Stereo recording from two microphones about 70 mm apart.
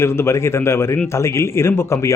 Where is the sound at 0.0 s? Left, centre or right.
Left.